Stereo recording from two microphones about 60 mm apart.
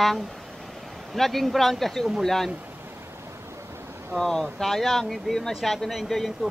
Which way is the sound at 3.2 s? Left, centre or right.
Right.